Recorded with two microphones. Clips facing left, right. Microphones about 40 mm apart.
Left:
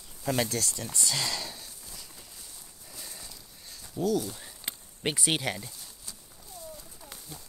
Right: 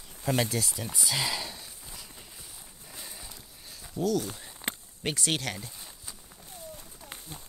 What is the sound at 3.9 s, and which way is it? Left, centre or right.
Speech, centre.